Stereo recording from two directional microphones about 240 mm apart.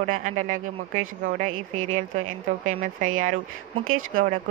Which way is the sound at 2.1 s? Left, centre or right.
Right.